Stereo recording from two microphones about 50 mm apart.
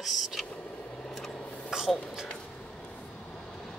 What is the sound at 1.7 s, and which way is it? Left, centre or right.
Speech, centre.